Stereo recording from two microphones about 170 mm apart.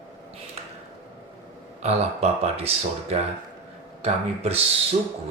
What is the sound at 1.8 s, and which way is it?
Speech, 40° right (ahead or behind).